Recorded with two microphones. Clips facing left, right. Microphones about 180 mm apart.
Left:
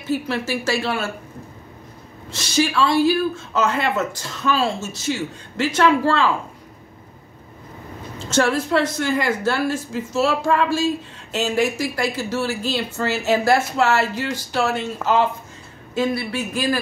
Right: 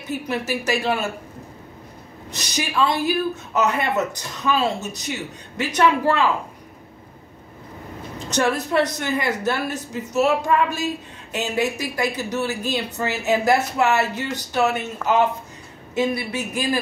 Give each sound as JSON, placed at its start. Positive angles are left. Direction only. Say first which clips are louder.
{"t": 0.1, "sound": "speech", "louder": "left 2 dB", "side_deg": -20}
{"t": 2.3, "sound": "speech", "louder": "left 4 dB", "side_deg": -20}
{"t": 8.2, "sound": "speech", "louder": "left 2 dB", "side_deg": -20}
{"t": 15.9, "sound": "speech", "louder": "left 1 dB", "side_deg": -20}